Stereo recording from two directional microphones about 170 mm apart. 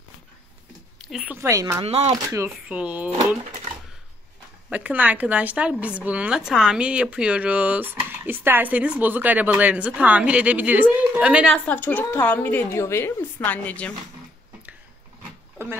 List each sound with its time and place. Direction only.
1.1 s a woman's voice: 10° right (ahead or behind)
1.8 s speech: 35° right (ahead or behind)
2.2 s a woman's voice: 15° right (ahead or behind)
4.6 s a woman's voice: 10° right (ahead or behind)
11.5 s a woman's voice: 10° left (ahead or behind)
15.5 s pig: 10° right (ahead or behind)